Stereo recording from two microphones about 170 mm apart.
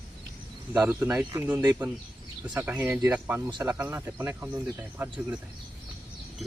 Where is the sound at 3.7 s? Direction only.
15° right (ahead or behind).